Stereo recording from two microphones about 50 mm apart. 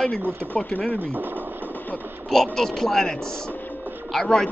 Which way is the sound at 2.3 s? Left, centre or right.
Centre.